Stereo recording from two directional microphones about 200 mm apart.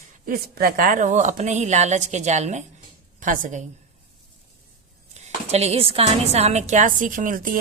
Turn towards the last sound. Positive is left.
turn(degrees=-40)  # may be behind; listen again after turning